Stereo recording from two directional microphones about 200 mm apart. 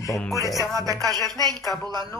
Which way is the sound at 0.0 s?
15° left (ahead or behind).